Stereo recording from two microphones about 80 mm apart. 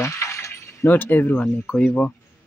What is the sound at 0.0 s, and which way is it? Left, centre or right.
Speech, left.